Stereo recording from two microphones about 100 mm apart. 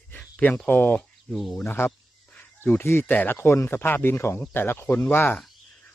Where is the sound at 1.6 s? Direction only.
25° left (ahead or behind).